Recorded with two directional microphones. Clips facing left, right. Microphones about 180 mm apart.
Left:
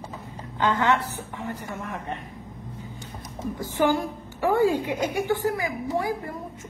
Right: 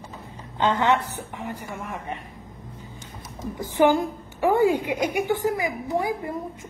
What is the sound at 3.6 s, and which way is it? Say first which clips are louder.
A woman's voice: right 4 dB; 15° right (ahead or behind).